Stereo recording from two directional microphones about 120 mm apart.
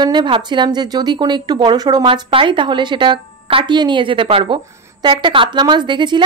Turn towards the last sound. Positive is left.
turn(degrees=-40)  # may be behind; listen again after turning